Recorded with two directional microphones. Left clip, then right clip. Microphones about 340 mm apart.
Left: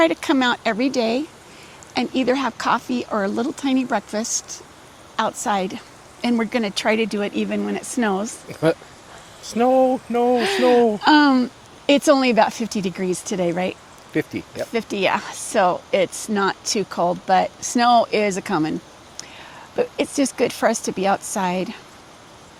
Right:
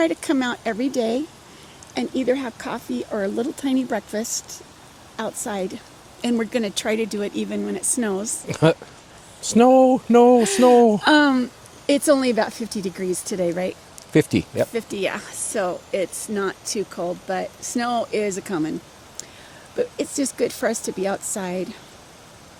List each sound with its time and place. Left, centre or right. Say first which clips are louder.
0.0 s speech: left 4 dB; centre
2.0 s speech: left 2 dB; left
8.4 s speech: right 2 dB; right
10.3 s speech: right 2 dB; centre
11.9 s speech: left 2 dB; left
14.1 s speech: right 6 dB; right
14.7 s speech: left 5 dB; left
19.7 s speech: left 3 dB; left